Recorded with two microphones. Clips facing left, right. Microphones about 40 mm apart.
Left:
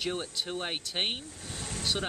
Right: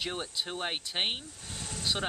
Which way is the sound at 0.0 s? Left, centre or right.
Centre.